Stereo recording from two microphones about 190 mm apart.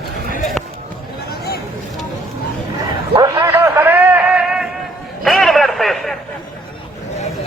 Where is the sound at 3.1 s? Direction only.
20° right (ahead or behind); by 6.2 s centre (ahead or behind).